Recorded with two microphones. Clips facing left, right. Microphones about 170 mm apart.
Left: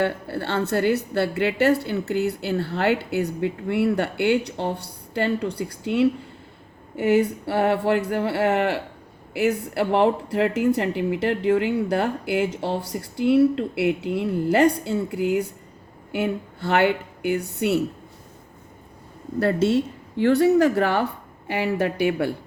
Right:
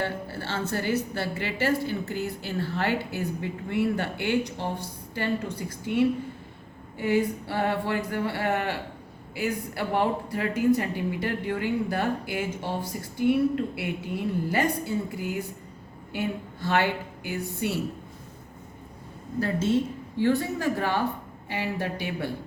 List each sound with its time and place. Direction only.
0.0 s a woman's voice: 60° left (ahead or behind)
19.4 s a woman's voice: 70° left (ahead or behind)